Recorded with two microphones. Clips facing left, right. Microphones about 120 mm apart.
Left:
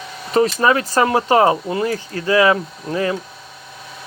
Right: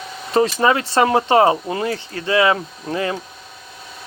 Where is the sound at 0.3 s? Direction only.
30° right (ahead or behind).